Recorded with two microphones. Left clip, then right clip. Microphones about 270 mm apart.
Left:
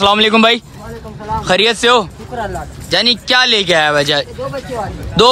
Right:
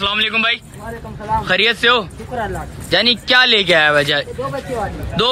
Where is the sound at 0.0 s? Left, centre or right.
Centre.